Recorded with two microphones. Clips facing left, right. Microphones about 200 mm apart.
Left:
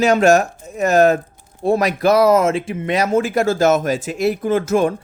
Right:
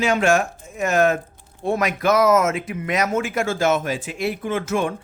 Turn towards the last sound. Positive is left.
turn(degrees=40)  # may be behind; listen again after turning